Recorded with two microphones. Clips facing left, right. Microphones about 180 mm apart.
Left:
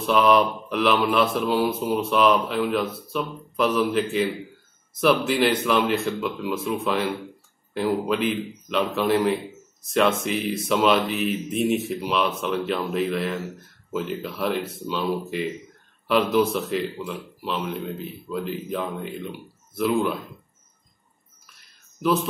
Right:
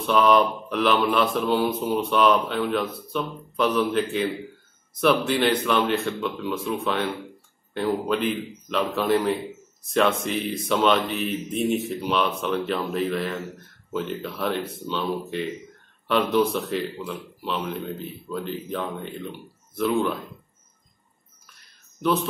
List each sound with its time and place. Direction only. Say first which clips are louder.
0.0 s a man's voice: even; centre (ahead or behind)
22.0 s a man's voice: left 1 dB; centre (ahead or behind)